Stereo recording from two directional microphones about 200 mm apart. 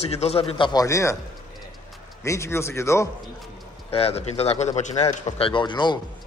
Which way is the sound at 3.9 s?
30° left (ahead or behind).